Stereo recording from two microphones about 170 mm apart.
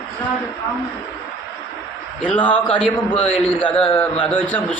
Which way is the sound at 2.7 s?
10° left (ahead or behind).